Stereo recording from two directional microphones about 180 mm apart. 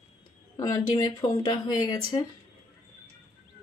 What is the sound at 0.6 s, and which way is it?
Speech, 20° left (ahead or behind).